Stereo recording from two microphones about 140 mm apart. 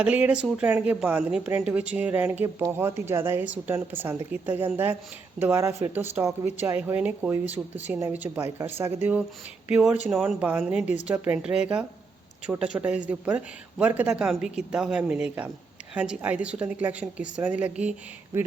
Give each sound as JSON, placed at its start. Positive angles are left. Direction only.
{"t": 0.0, "sound": "speech", "side_deg": -10}